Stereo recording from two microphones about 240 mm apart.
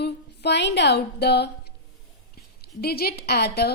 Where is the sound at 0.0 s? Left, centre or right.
Left.